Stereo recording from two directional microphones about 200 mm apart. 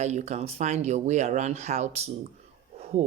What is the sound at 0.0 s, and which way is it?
Speech, 35° right (ahead or behind).